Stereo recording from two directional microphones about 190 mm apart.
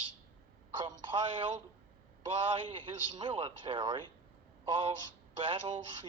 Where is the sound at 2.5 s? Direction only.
25° right (ahead or behind).